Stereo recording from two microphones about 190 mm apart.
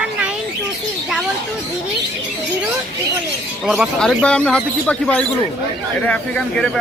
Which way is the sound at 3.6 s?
Centre (ahead or behind).